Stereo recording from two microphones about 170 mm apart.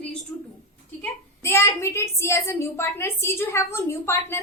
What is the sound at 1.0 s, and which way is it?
A woman's voice, 15° left (ahead or behind).